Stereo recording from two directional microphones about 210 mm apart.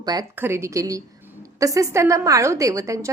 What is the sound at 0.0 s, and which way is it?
A woman's voice, 20° right (ahead or behind).